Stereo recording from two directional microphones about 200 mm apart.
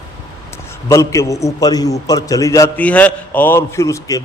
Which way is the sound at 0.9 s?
15° left (ahead or behind).